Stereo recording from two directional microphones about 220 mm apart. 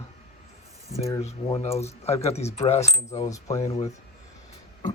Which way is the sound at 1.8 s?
30° left (ahead or behind).